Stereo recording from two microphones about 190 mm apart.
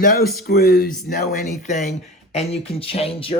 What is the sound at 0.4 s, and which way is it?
Speech, 55° left (ahead or behind).